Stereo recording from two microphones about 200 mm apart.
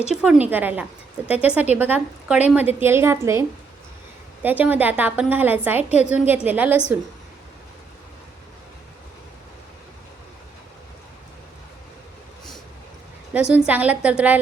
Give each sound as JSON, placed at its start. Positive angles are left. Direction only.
{"t": 0.2, "sound": "a woman's voice", "side_deg": -5}
{"t": 4.4, "sound": "a woman's voice", "side_deg": -10}
{"t": 5.9, "sound": "a woman's voice", "side_deg": 35}
{"t": 6.1, "sound": "a woman's voice", "side_deg": -5}
{"t": 13.3, "sound": "a woman's voice", "side_deg": -5}